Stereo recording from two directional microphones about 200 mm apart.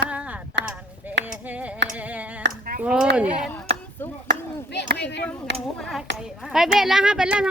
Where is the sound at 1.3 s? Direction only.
5° right (ahead or behind).